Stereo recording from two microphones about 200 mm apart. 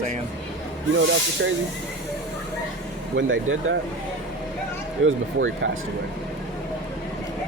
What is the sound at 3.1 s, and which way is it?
Speech, 75° right (ahead or behind).